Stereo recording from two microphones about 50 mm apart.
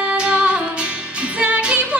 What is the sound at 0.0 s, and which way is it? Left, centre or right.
Music, right.